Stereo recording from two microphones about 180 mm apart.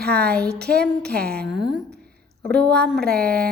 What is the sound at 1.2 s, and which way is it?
Speech, 60° right (ahead or behind).